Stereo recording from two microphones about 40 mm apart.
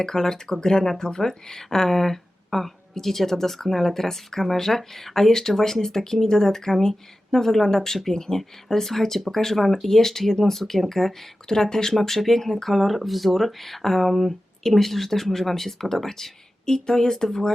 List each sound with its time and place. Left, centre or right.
0.0 s speech: centre